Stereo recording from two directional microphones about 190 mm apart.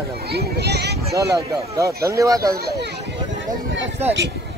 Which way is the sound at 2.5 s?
55° right (ahead or behind).